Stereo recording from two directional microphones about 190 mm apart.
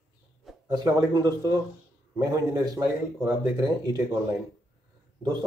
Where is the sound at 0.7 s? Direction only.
20° right (ahead or behind).